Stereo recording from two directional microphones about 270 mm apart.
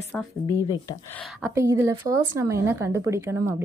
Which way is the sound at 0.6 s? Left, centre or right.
Centre.